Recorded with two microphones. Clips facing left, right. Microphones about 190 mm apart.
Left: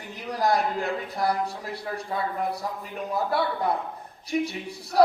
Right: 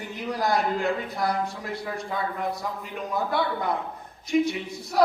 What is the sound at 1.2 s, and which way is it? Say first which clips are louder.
Speech: left 2 dB; 35° left (ahead or behind).